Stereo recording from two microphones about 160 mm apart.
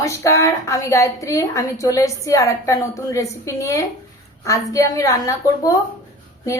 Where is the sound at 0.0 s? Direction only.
20° left (ahead or behind).